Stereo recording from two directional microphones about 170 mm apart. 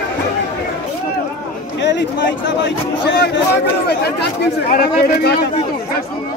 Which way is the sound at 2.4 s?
90° left.